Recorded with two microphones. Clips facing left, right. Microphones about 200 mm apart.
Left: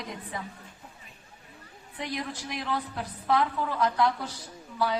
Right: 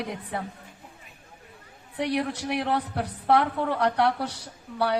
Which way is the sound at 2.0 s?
70° right (ahead or behind).